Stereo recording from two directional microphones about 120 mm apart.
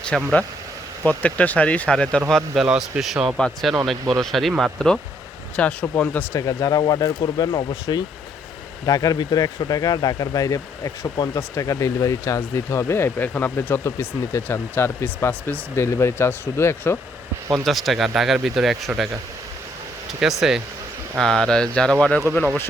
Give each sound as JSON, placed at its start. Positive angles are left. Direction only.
{"t": 0.1, "sound": "speech", "side_deg": 5}
{"t": 1.0, "sound": "speech", "side_deg": 15}
{"t": 6.3, "sound": "speech", "side_deg": 30}
{"t": 17.5, "sound": "speech", "side_deg": 0}
{"t": 20.1, "sound": "speech", "side_deg": -5}